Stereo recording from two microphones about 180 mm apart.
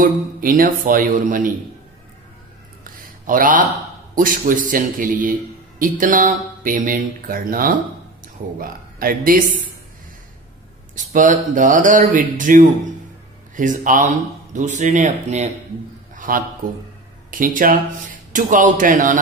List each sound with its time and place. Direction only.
0.0 s speech: 50° right (ahead or behind)
2.8 s a sound: 50° right (ahead or behind)
4.1 s speech: 50° right (ahead or behind)
11.0 s speech: 45° right (ahead or behind)
16.2 s a man's voice: 50° right (ahead or behind)